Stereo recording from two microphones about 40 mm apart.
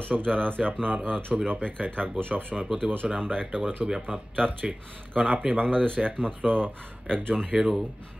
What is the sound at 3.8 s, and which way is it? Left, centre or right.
Speech, centre.